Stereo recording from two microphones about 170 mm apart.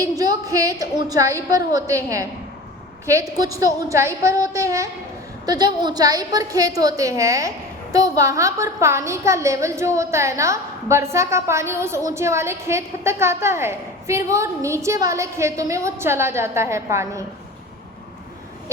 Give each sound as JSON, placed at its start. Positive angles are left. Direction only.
{"t": 0.0, "sound": "a woman's voice", "side_deg": -20}
{"t": 3.3, "sound": "a woman's voice", "side_deg": -20}